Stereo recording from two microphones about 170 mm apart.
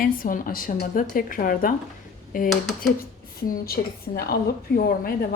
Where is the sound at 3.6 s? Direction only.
65° left (ahead or behind).